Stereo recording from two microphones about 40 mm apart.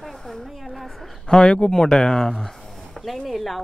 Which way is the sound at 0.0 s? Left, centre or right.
Centre.